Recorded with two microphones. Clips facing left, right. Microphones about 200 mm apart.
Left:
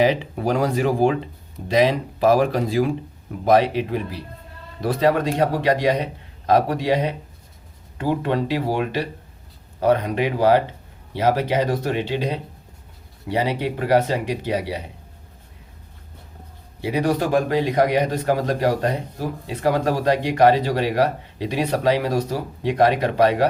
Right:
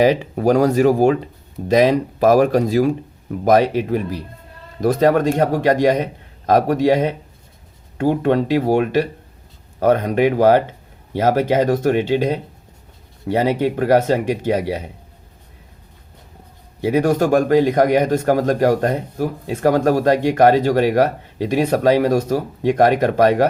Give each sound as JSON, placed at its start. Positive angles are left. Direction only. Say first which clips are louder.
{"t": 0.0, "sound": "speech", "louder": "right 4 dB", "side_deg": -45}
{"t": 16.9, "sound": "speech", "louder": "right 4 dB", "side_deg": -45}